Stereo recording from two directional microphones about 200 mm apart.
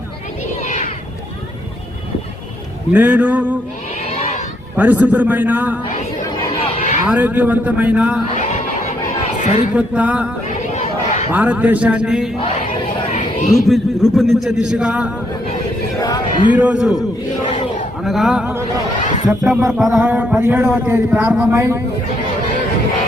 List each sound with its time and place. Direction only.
0.6 s a sound: 35° left (ahead or behind)
2.9 s speech: 10° right (ahead or behind)
4.0 s a sound: 30° left (ahead or behind)
4.8 s speech: 10° right (ahead or behind)
6.6 s a sound: 35° left (ahead or behind)
7.1 s speech: 10° right (ahead or behind)
9.4 s a man's voice: 30° left (ahead or behind)
9.7 s speech: 5° right (ahead or behind)
13.5 s speech: centre (ahead or behind)
16.0 s a sound: 20° left (ahead or behind)
16.5 s speech: 10° right (ahead or behind)
18.0 s speech: centre (ahead or behind)